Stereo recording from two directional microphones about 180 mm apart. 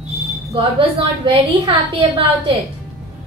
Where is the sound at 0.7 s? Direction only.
30° right (ahead or behind).